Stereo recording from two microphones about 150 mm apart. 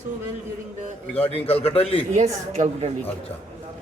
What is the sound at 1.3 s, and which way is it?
Speech, 40° left (ahead or behind).